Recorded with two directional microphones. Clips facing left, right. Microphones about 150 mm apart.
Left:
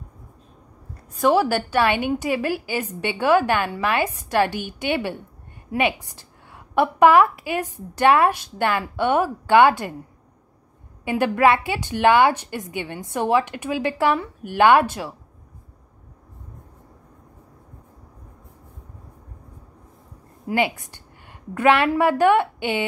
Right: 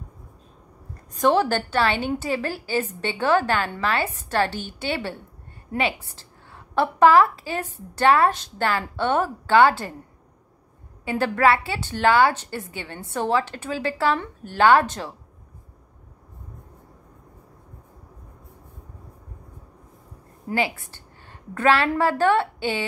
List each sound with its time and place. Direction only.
1.2 s a woman's voice: 10° left (ahead or behind)
11.1 s a woman's voice: 15° left (ahead or behind)
20.4 s a woman's voice: 20° left (ahead or behind)